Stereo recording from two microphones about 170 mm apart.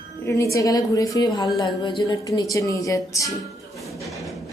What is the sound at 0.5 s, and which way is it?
Speech, 20° left (ahead or behind).